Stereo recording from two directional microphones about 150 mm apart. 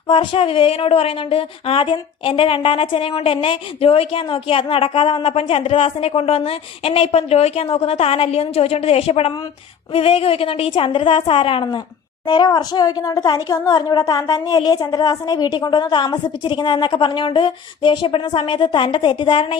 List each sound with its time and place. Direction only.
0.1 s speech: 35° left (ahead or behind)